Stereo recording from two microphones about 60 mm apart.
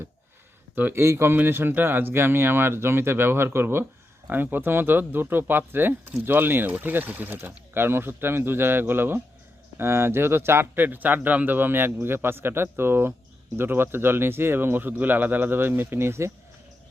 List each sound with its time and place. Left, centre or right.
0.9 s speech: right